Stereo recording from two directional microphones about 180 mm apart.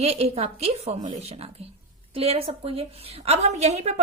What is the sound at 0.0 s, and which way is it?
A woman's voice, 35° right (ahead or behind).